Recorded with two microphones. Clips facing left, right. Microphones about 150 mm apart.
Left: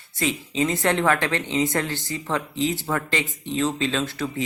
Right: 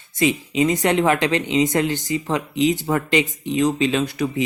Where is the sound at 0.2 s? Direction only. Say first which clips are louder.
Right 5 dB; 15° right (ahead or behind).